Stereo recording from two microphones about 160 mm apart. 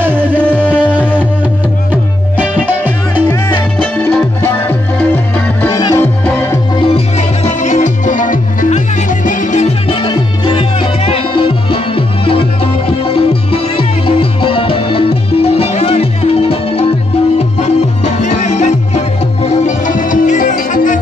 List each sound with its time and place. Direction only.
0.0 s music: 10° right (ahead or behind)
0.4 s music: 10° left (ahead or behind)
2.3 s music: 10° right (ahead or behind)
4.1 s music: 15° left (ahead or behind)
5.7 s music: 25° left (ahead or behind)
7.4 s music: 50° left (ahead or behind)